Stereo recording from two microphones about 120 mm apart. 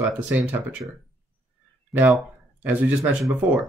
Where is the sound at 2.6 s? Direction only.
15° right (ahead or behind).